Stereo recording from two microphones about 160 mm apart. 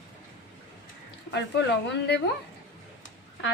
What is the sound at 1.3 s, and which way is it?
Speech, 90° left.